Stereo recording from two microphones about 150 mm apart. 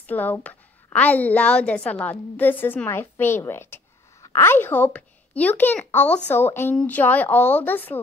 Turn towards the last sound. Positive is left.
turn(degrees=10)  # may be behind; listen again after turning